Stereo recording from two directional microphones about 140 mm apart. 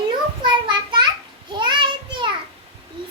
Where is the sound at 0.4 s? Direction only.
35° right (ahead or behind).